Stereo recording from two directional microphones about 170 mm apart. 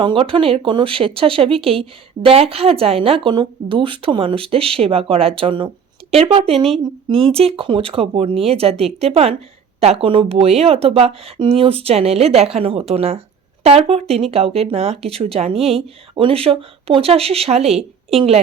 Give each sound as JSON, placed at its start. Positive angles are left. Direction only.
{"t": 0.0, "sound": "speech", "side_deg": -30}